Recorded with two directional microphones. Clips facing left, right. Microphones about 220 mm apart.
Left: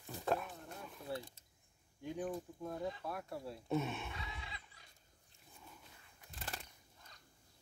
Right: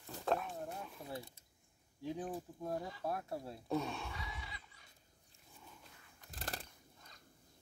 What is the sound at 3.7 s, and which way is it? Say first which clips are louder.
Gasp: even; 20° left (ahead or behind).